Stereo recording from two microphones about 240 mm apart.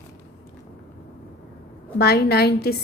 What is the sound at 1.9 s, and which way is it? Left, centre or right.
Speech, left.